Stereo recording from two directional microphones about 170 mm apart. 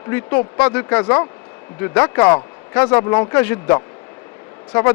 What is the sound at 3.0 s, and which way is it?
Speech, 20° left (ahead or behind).